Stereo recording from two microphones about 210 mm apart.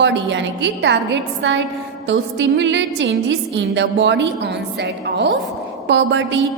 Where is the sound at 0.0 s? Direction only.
60° right (ahead or behind).